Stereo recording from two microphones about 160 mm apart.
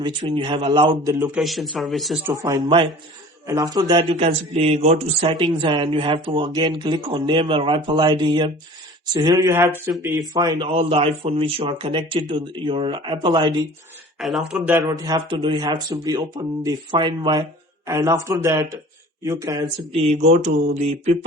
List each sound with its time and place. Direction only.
0.0 s speech: 30° right (ahead or behind)
1.2 s speech: 5° right (ahead or behind)
2.2 s speech: 20° right (ahead or behind)
14.2 s speech: centre (ahead or behind)
14.7 s speech: 20° right (ahead or behind)
19.9 s mantra: 50° right (ahead or behind)